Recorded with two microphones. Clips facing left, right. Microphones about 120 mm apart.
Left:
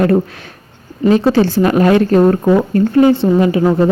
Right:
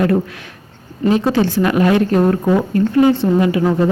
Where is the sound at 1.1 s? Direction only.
35° left (ahead or behind).